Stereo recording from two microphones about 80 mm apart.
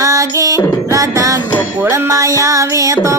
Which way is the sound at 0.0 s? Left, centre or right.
Right.